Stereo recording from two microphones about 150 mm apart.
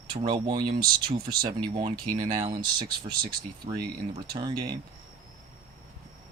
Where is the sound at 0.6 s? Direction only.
80° right.